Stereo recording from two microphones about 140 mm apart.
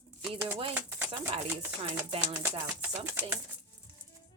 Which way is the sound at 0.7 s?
15° right (ahead or behind).